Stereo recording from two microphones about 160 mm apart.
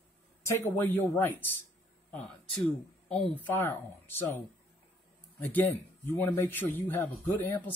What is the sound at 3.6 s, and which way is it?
Speech, 15° left (ahead or behind).